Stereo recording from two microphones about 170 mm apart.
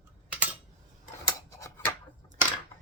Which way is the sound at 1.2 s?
20° left (ahead or behind).